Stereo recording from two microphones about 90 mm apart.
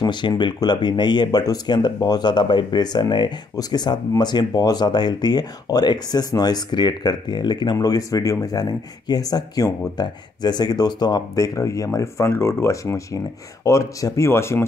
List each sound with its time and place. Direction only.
0.0 s speech: 60° left (ahead or behind)
7.7 s speech: 40° left (ahead or behind)